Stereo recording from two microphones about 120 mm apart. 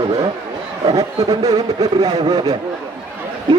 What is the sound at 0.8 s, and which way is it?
A man's voice, 30° right (ahead or behind).